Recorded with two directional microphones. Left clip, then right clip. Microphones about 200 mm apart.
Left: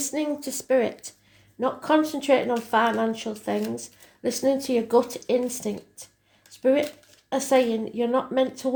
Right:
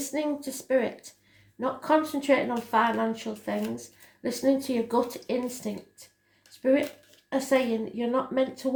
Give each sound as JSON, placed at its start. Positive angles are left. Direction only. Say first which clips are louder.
{"t": 0.0, "sound": "speech", "louder": "left 2 dB", "side_deg": 35}
{"t": 6.5, "sound": "a sound", "louder": "left 3 dB", "side_deg": 35}
{"t": 7.3, "sound": "speech", "louder": "left 4 dB", "side_deg": 35}